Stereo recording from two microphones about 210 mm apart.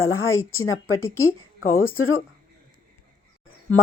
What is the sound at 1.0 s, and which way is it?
Speech, 10° left (ahead or behind).